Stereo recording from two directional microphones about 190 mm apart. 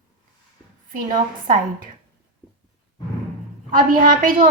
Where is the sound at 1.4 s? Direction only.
45° right (ahead or behind).